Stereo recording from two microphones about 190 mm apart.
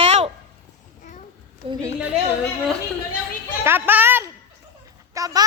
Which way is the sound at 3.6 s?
10° right (ahead or behind).